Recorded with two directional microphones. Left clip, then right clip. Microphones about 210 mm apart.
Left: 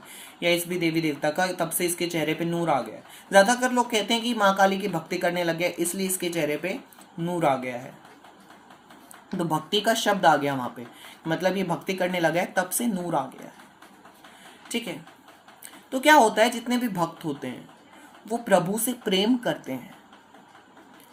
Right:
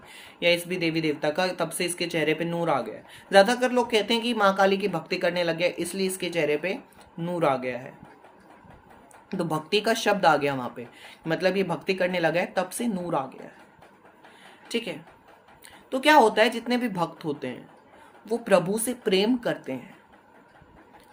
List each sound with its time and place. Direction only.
0.3 s speech: 15° right (ahead or behind)
9.4 s speech: 15° right (ahead or behind)
14.7 s speech: 15° right (ahead or behind)